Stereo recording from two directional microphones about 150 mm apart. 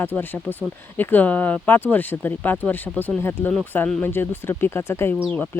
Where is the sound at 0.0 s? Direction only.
15° left (ahead or behind).